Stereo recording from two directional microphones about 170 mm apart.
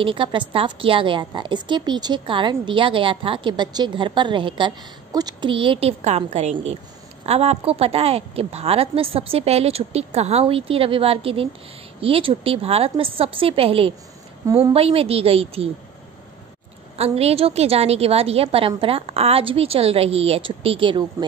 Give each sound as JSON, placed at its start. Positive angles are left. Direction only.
{"t": 0.0, "sound": "a woman's voice", "side_deg": -30}
{"t": 16.9, "sound": "a woman's voice", "side_deg": -35}